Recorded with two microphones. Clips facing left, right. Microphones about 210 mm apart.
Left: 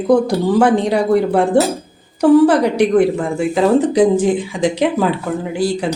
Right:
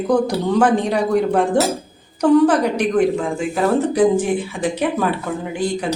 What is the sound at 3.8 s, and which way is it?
Speech, 15° left (ahead or behind).